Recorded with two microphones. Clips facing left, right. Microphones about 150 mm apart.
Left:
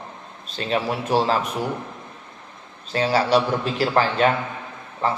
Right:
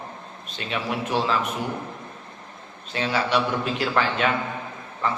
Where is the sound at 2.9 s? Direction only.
35° left (ahead or behind).